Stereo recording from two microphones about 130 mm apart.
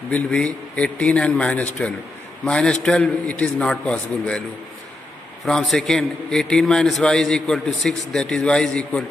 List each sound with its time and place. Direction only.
0.1 s a man's voice: 10° left (ahead or behind)
5.4 s a man's voice: 5° left (ahead or behind)